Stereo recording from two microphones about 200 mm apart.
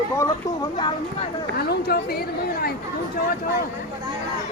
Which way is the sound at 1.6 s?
50° left (ahead or behind).